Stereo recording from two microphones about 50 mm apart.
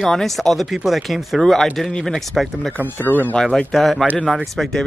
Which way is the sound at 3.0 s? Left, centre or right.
Left.